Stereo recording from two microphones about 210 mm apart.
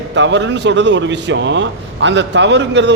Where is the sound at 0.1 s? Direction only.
60° right (ahead or behind).